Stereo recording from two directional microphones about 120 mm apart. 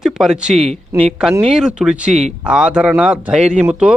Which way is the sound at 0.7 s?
60° right (ahead or behind).